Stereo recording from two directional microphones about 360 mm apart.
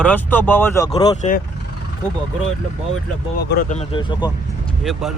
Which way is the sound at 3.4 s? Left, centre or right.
Left.